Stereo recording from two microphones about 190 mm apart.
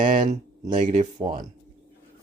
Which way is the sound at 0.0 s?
45° right (ahead or behind).